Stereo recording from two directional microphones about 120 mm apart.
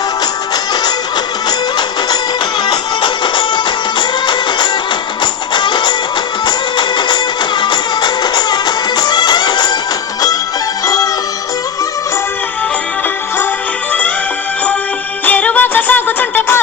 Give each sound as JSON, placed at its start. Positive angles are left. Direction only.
{"t": 0.5, "sound": "music", "side_deg": 35}
{"t": 2.6, "sound": "music", "side_deg": 40}
{"t": 10.8, "sound": "music", "side_deg": 30}
{"t": 15.2, "sound": "music", "side_deg": 15}